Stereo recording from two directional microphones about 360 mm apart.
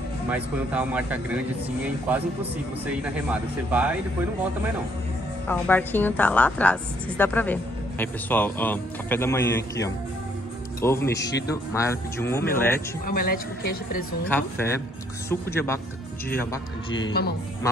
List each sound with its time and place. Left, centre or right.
0.3 s a woman's voice: centre
5.5 s a woman's voice: centre
13.0 s a woman's voice: left
14.3 s speech: centre
16.9 s a woman's voice: left